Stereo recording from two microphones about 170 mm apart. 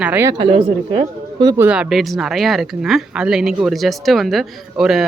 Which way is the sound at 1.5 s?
10° right (ahead or behind).